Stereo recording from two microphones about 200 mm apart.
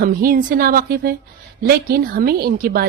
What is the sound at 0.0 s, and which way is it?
Speech, 45° right (ahead or behind).